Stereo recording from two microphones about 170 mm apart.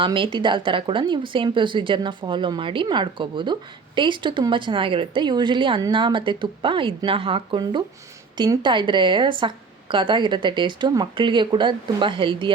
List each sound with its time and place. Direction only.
0.0 s speech: 30° right (ahead or behind)